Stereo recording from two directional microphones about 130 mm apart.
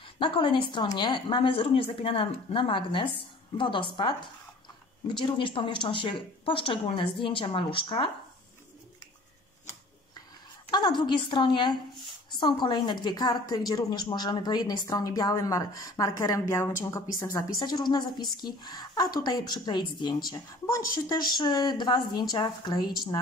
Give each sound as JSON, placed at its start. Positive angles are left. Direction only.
{"t": 0.0, "sound": "a woman's voice", "side_deg": 40}
{"t": 10.7, "sound": "a woman's voice", "side_deg": 35}